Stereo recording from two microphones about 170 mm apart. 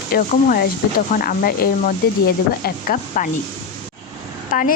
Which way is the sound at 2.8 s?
50° left (ahead or behind).